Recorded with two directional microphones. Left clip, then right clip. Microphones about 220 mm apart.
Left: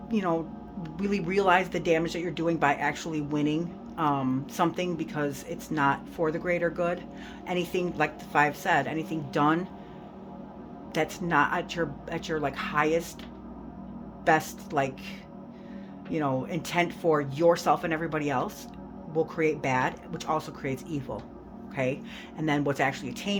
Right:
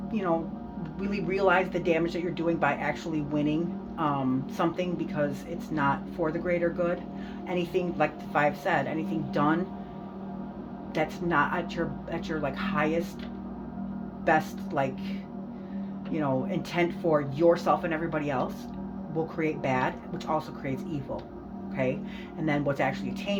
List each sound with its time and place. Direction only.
0.1 s speech: 50° left (ahead or behind)
10.9 s speech: 50° left (ahead or behind)
14.3 s speech: 50° left (ahead or behind)